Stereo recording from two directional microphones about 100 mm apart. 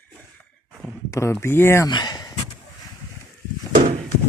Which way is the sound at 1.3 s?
25° left (ahead or behind).